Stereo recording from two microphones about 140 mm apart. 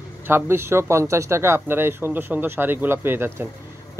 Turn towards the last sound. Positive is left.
turn(degrees=-15)  # may be behind; listen again after turning